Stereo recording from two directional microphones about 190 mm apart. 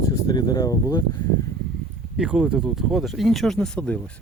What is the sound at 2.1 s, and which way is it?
Speech, 5° right (ahead or behind).